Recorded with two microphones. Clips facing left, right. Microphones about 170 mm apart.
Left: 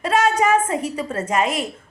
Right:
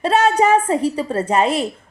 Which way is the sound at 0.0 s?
30° right (ahead or behind).